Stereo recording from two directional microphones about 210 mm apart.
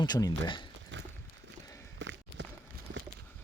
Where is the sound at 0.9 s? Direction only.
60° right (ahead or behind).